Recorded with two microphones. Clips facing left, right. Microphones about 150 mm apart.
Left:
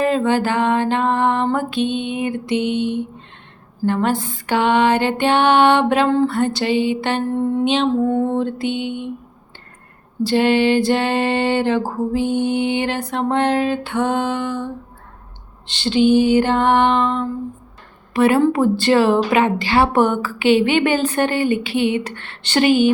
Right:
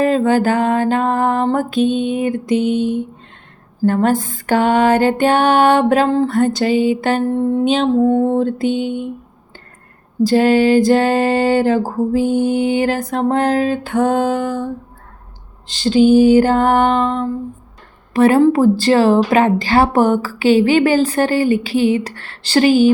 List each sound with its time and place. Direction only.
0.0 s a woman's voice: 40° right (ahead or behind)
3.8 s music: 45° right (ahead or behind)
8.0 s a woman's voice: 35° right (ahead or behind)
10.2 s a woman's voice: 40° right (ahead or behind)
15.7 s a woman's voice: 40° right (ahead or behind)